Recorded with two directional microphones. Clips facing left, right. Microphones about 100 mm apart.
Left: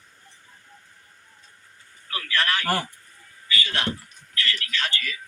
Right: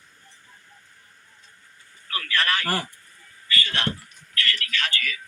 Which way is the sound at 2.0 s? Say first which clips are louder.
Even; 5° left (ahead or behind).